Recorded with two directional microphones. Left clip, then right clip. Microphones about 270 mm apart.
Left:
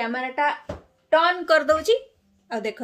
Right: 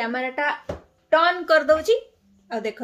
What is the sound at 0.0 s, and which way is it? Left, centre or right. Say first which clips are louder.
Speech: left 1 dB; centre.